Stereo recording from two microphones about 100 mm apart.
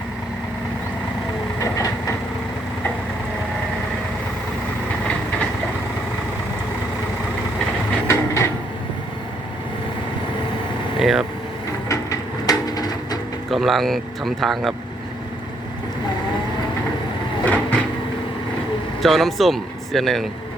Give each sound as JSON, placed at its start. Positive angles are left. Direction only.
{"t": 1.5, "sound": "train", "side_deg": 30}
{"t": 8.0, "sound": "a sound", "side_deg": 30}
{"t": 11.0, "sound": "vehicle", "side_deg": -5}
{"t": 12.5, "sound": "a sound", "side_deg": 40}
{"t": 13.5, "sound": "speech", "side_deg": 0}
{"t": 17.4, "sound": "vehicle", "side_deg": 15}
{"t": 19.0, "sound": "speech", "side_deg": 0}